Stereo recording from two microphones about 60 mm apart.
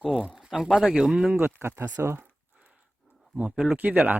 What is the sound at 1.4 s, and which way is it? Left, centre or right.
Speech, right.